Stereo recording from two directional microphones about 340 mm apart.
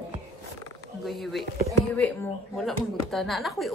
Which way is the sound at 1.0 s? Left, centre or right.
Centre.